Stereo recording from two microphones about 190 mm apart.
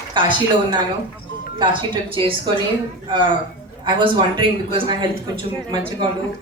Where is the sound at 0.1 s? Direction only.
25° right (ahead or behind).